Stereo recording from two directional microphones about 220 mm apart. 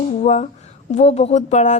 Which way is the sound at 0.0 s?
30° left (ahead or behind).